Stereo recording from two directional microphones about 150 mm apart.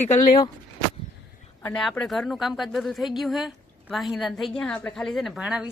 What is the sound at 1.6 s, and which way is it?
A woman's voice, 5° left (ahead or behind).